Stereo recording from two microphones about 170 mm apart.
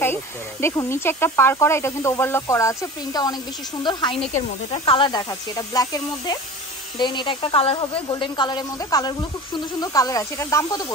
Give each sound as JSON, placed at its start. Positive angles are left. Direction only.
{"t": 0.0, "sound": "speech", "side_deg": 15}